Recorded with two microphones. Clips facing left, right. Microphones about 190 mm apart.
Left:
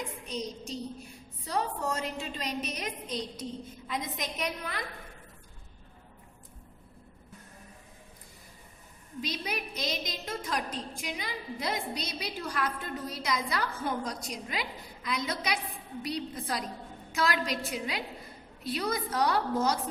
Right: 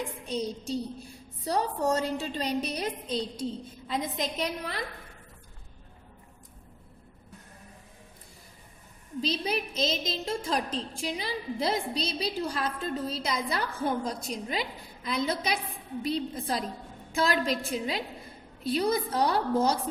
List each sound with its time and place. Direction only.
0.3 s a woman's voice: 30° right (ahead or behind)
9.2 s a woman's voice: 30° right (ahead or behind)